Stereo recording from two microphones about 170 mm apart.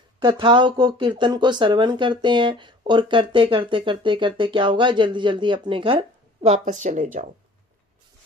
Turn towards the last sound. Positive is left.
turn(degrees=-45)  # may be behind; listen again after turning